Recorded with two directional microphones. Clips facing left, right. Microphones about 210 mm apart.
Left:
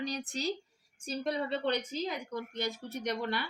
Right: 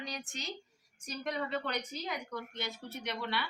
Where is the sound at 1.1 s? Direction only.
30° left (ahead or behind).